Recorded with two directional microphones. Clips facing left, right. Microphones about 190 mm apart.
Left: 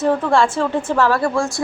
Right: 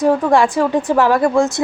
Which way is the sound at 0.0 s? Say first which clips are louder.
Right 3 dB; 15° right (ahead or behind).